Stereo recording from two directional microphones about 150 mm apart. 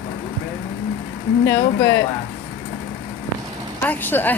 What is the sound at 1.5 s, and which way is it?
Speech, 20° left (ahead or behind).